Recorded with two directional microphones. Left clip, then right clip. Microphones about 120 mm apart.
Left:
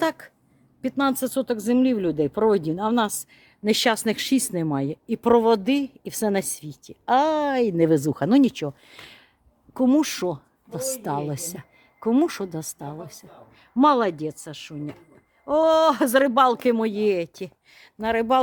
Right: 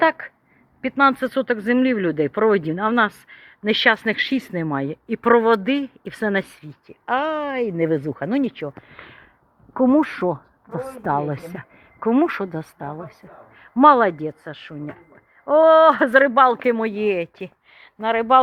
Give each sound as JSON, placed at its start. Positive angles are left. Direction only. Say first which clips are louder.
{"t": 0.0, "sound": "a woman's voice", "louder": "right 7 dB", "side_deg": 15}
{"t": 3.7, "sound": "a woman's voice", "louder": "right 4 dB", "side_deg": 40}
{"t": 4.6, "sound": "a woman's voice", "louder": "right 2 dB", "side_deg": 30}
{"t": 6.5, "sound": "speech", "louder": "left 4 dB", "side_deg": 55}
{"t": 8.9, "sound": "speech", "louder": "right 2 dB", "side_deg": 35}
{"t": 9.7, "sound": "a woman's voice", "louder": "right 3 dB", "side_deg": 20}